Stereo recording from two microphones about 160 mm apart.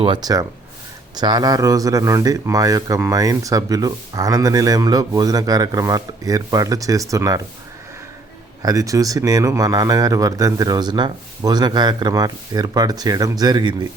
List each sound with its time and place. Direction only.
0.0 s speech: 25° right (ahead or behind)
8.6 s speech: 20° right (ahead or behind)